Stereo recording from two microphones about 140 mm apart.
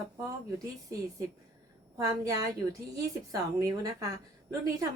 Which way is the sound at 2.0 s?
25° right (ahead or behind).